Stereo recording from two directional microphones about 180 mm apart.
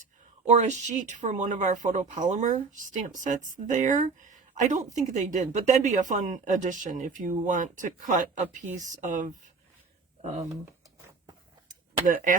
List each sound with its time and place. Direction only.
0.0 s speech: 40° right (ahead or behind)
12.0 s speech: 45° right (ahead or behind)